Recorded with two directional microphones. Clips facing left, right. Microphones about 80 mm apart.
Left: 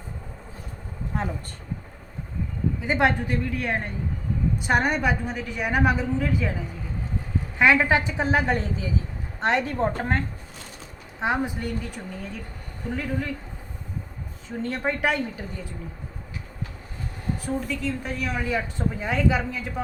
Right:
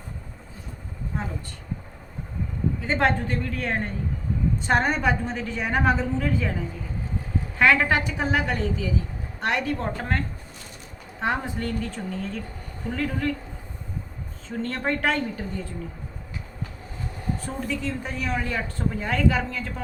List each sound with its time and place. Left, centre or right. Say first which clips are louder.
2.8 s speech: left 1 dB; centre
7.6 s a woman's voice: left 1 dB; centre
11.2 s speech: left 1 dB; centre
14.4 s speech: even; centre
17.4 s speech: left 3 dB; centre